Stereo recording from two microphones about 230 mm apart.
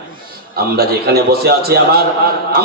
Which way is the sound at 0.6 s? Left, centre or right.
Right.